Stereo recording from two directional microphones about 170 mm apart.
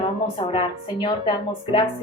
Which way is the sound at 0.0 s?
30° left (ahead or behind).